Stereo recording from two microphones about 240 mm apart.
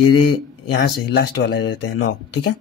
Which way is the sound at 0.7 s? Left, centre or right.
Left.